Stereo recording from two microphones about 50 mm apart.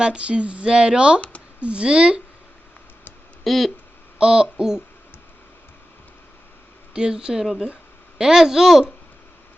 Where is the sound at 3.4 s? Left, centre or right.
Centre.